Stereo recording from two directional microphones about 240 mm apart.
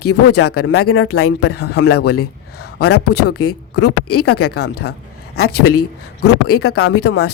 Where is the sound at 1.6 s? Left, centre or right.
Left.